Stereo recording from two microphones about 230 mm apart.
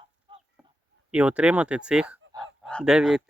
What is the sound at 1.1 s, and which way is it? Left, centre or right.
Speech, centre.